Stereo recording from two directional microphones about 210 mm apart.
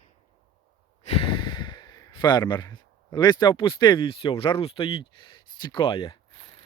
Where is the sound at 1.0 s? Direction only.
25° left (ahead or behind).